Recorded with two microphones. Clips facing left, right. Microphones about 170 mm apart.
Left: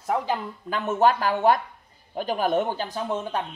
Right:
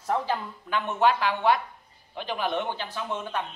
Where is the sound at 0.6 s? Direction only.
40° left (ahead or behind).